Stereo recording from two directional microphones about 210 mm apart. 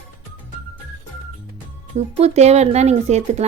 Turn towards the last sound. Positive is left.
turn(degrees=-30)  # may be behind; listen again after turning